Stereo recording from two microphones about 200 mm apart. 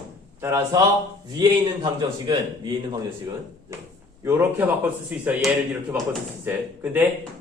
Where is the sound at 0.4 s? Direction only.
15° right (ahead or behind).